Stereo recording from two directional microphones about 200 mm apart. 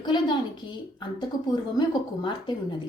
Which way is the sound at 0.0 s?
20° left (ahead or behind).